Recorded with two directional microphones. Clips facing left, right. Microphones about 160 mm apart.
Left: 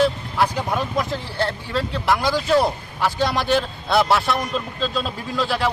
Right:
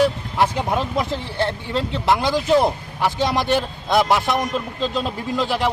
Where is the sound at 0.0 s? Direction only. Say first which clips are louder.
Right 1 dB; 20° right (ahead or behind).